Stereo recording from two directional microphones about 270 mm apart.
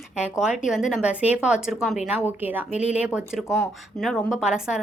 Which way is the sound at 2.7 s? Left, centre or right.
Left.